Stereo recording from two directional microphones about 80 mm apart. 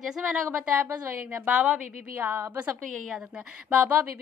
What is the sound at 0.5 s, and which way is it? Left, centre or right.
A woman's voice, centre.